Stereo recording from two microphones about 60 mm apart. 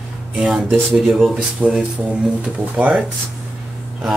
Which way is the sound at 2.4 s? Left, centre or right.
Centre.